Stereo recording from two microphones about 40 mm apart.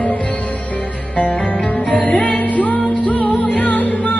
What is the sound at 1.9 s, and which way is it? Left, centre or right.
Music, left.